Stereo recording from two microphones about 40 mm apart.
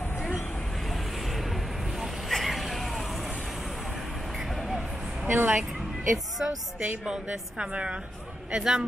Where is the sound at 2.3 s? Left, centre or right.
Centre.